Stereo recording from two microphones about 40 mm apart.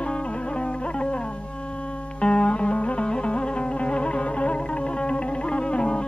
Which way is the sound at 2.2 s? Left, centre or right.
Left.